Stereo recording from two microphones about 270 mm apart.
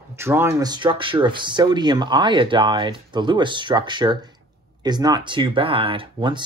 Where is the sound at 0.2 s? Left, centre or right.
Centre.